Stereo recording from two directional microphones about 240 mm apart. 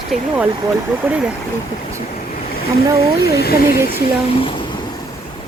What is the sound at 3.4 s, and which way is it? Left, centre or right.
Speech, left.